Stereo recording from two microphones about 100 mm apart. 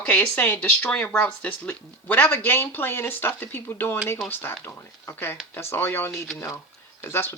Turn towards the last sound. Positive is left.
turn(degrees=25)  # may be behind; listen again after turning